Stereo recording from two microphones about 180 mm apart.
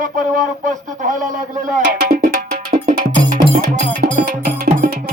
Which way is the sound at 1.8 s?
55° right (ahead or behind).